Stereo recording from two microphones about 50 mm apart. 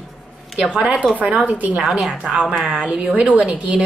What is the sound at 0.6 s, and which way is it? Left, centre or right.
Speech, centre.